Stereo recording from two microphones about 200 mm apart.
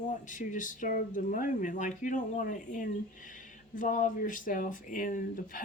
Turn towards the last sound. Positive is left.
turn(degrees=40)  # may be behind; listen again after turning